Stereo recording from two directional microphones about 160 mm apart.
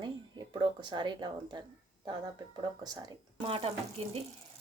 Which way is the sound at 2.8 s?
25° right (ahead or behind).